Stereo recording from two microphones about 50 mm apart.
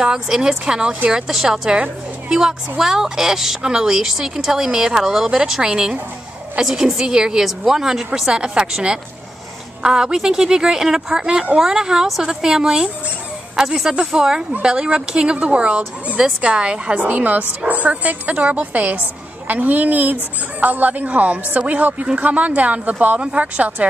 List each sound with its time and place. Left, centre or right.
0.0 s a woman's voice: centre
1.7 s a woman's voice: centre